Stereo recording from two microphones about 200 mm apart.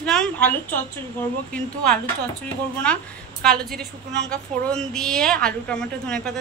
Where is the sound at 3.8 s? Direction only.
60° right (ahead or behind).